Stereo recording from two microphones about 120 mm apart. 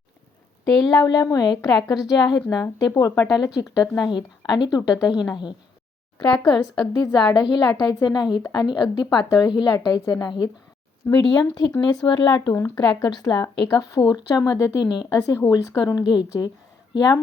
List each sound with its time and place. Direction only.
0.9 s a woman's voice: 35° left (ahead or behind)
12.5 s speech: 25° left (ahead or behind)
13.0 s a woman's voice: 35° left (ahead or behind)